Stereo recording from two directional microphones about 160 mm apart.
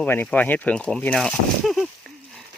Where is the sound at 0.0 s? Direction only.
10° left (ahead or behind).